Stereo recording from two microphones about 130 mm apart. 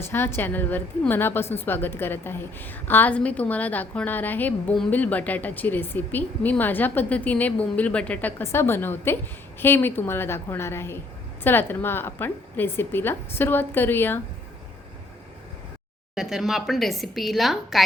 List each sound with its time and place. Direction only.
0.0 s a woman's voice: 20° left (ahead or behind)
16.1 s a woman's voice: 5° right (ahead or behind)